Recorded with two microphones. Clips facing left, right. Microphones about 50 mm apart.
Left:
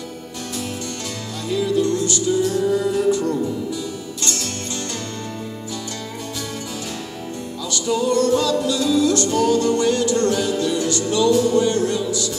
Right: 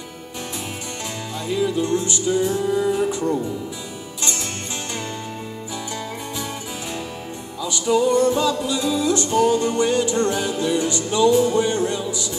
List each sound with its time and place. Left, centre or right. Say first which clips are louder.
1.5 s music: left 1 dB; right
7.6 s music: right 2 dB; centre